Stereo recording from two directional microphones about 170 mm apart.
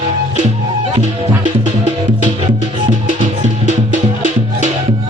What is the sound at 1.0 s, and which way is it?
Music, 45° right (ahead or behind).